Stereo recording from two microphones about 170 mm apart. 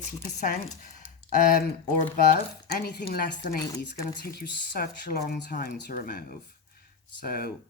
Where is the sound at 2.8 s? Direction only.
70° left (ahead or behind).